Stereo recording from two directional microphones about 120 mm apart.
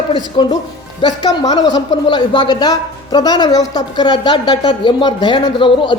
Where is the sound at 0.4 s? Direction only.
40° left (ahead or behind).